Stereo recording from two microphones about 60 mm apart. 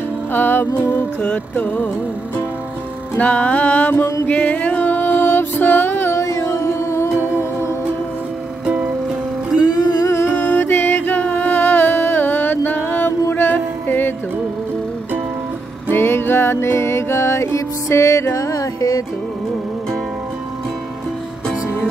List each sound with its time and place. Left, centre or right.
0.3 s music: left
1.5 s music: left
3.2 s music: left
6.1 s music: left
8.6 s music: right
9.6 s music: left
10.3 s music: left
15.9 s music: left